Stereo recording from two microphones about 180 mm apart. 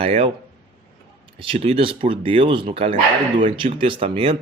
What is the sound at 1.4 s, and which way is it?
Speech, 30° right (ahead or behind).